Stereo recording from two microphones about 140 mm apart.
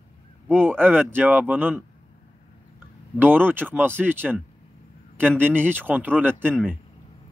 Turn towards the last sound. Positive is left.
turn(degrees=-15)  # may be behind; listen again after turning